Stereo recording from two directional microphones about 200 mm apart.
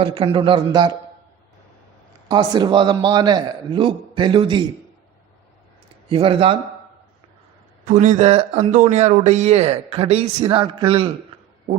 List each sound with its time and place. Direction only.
0.0 s a man's voice: 25° right (ahead or behind)
2.3 s a man's voice: 20° right (ahead or behind)
6.1 s a man's voice: 25° right (ahead or behind)
7.9 s speech: 35° right (ahead or behind)